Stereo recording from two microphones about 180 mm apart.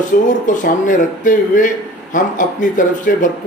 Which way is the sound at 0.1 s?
55° left (ahead or behind).